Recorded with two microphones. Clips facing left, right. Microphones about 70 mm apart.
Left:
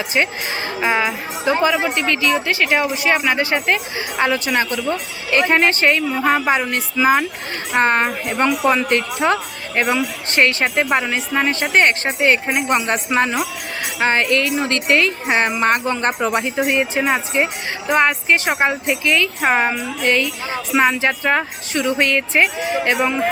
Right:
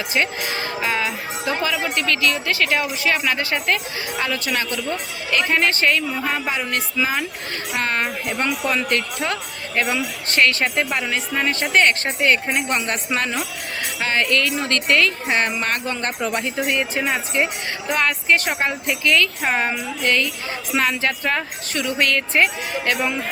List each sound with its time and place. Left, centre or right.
0.1 s speech: left